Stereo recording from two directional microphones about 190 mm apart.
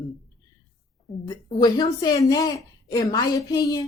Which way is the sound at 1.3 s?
20° left (ahead or behind).